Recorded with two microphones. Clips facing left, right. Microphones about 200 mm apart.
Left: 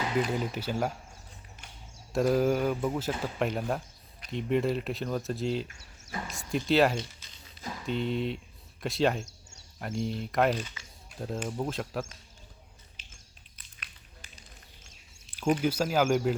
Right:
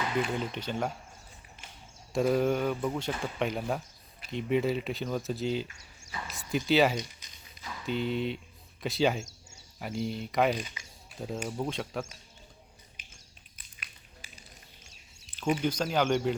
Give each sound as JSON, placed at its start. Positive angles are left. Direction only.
{"t": 0.2, "sound": "speech", "side_deg": 5}
{"t": 2.1, "sound": "speech", "side_deg": 0}
{"t": 9.2, "sound": "a sound", "side_deg": 70}
{"t": 9.7, "sound": "speech", "side_deg": 0}
{"t": 10.5, "sound": "speech", "side_deg": -10}
{"t": 11.1, "sound": "speech", "side_deg": 0}
{"t": 15.6, "sound": "speech", "side_deg": 5}